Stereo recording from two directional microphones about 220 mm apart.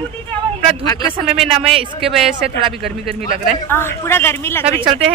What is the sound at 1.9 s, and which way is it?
A man's voice, centre (ahead or behind).